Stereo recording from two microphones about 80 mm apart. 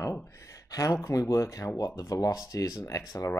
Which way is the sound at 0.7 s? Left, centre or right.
Left.